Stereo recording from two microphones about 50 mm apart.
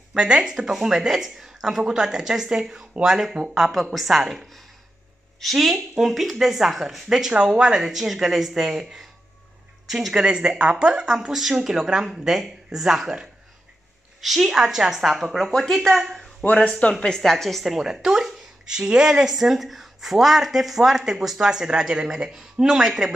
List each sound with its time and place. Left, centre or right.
0.1 s speech: centre
15.5 s speech: centre
17.7 s speech: centre